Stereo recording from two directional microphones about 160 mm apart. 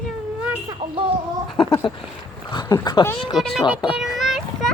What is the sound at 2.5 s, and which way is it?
Dog, 25° left (ahead or behind).